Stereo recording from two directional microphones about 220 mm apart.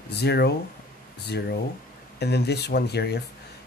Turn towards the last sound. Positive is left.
turn(degrees=50)  # may be behind; listen again after turning